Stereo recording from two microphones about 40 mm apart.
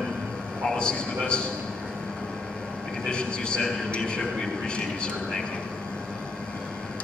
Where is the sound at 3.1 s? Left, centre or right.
Left.